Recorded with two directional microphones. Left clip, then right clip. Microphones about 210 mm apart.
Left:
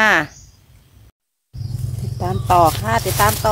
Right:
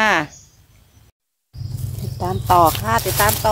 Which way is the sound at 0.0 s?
Centre (ahead or behind).